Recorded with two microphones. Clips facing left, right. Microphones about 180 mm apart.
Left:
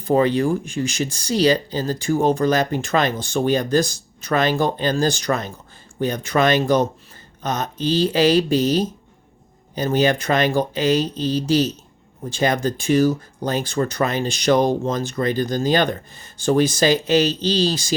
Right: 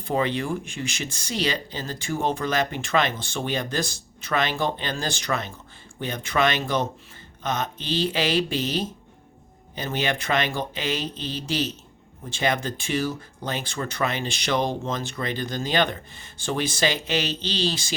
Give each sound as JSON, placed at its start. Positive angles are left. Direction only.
{"t": 0.0, "sound": "speech", "side_deg": 40}